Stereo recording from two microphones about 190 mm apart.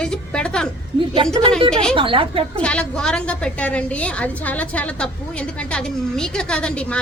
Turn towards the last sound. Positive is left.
turn(degrees=5)  # may be behind; listen again after turning